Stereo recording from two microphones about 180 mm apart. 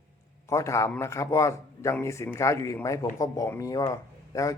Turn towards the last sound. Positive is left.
turn(degrees=20)  # may be behind; listen again after turning